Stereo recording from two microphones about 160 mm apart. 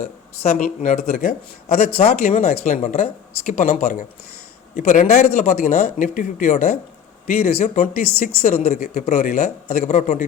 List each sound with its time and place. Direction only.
0.4 s speech: 60° left (ahead or behind)
7.3 s speech: 70° left (ahead or behind)
7.6 s speech: 60° left (ahead or behind)
8.4 s speech: 45° left (ahead or behind)